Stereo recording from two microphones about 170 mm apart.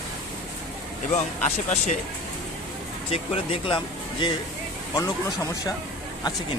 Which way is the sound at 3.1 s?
35° left (ahead or behind).